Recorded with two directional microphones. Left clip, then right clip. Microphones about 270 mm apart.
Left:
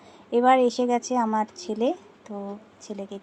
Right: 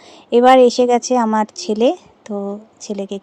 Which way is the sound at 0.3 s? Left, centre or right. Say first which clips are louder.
Right 10 dB; right.